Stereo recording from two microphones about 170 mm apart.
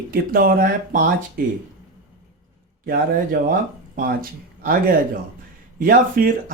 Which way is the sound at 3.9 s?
60° right (ahead or behind).